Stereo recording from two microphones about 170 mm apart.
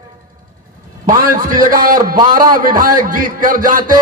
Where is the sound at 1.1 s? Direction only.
55° right (ahead or behind).